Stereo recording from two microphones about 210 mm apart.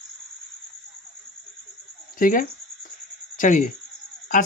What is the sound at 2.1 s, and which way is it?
Speech, 40° left (ahead or behind).